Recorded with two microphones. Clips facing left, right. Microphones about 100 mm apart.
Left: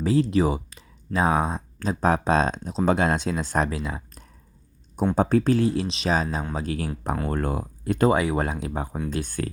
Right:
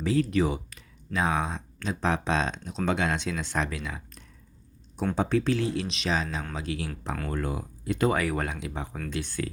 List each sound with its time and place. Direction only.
0.0 s speech: 30° left (ahead or behind); by 8.1 s 45° left (ahead or behind)
8.1 s speech: 25° left (ahead or behind)
8.5 s speech: 40° left (ahead or behind)